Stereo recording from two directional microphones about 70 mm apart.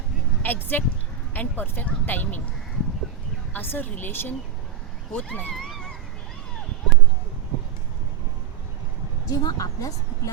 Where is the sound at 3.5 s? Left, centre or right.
Left.